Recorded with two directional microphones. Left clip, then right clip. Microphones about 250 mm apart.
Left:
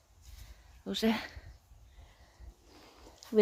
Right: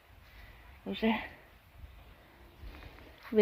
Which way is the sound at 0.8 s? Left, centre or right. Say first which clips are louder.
Even; centre.